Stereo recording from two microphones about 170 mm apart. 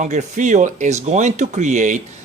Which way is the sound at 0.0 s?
45° right (ahead or behind).